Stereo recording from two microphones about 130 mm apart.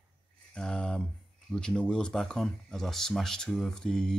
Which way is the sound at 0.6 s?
5° left (ahead or behind).